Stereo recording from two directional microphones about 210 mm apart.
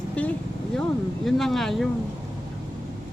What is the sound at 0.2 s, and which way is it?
Speech, 5° left (ahead or behind).